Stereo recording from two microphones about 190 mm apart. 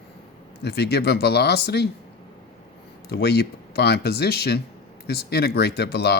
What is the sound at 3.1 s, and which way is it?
Speech, 60° left (ahead or behind).